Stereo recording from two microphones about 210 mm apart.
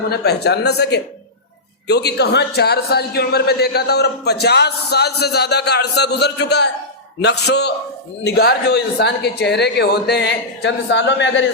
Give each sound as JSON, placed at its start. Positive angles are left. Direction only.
{"t": 0.1, "sound": "a man's voice", "side_deg": 50}